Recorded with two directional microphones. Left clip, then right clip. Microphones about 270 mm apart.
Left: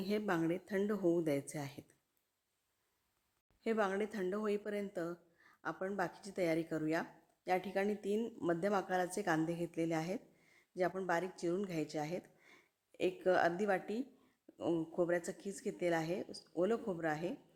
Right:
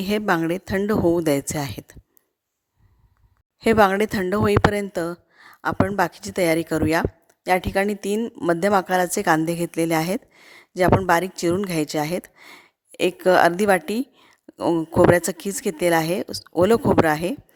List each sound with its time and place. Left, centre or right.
0.0 s speech: right
3.6 s speech: right